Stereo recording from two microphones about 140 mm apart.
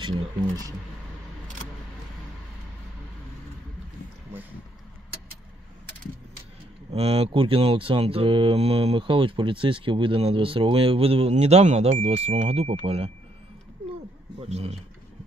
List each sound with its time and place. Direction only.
6.9 s speech: 45° right (ahead or behind)
14.4 s speech: 45° right (ahead or behind)